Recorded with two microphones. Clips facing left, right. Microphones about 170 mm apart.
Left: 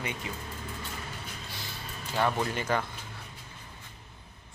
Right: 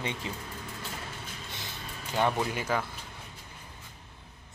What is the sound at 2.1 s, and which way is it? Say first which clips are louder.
Speech: even; 10° right (ahead or behind).